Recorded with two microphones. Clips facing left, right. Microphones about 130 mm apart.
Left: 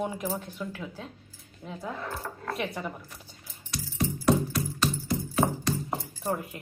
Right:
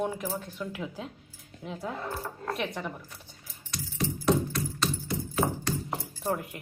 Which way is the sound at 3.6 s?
10° left (ahead or behind).